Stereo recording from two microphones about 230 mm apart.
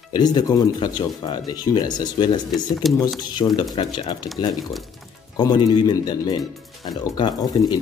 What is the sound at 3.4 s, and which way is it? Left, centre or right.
Speech, centre.